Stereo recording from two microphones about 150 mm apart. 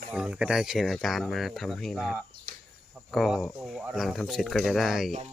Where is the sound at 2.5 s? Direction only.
70° right (ahead or behind).